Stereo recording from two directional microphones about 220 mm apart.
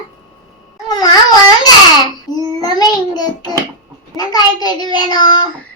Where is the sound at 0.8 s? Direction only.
15° left (ahead or behind).